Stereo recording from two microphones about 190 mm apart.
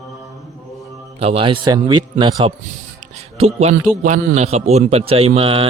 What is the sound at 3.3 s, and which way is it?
A man's voice, 35° right (ahead or behind).